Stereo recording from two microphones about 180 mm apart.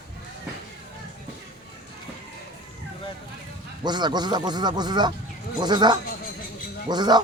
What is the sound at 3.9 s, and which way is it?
Speech, 25° right (ahead or behind).